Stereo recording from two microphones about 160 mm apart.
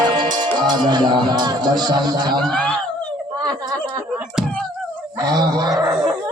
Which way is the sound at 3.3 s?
25° right (ahead or behind).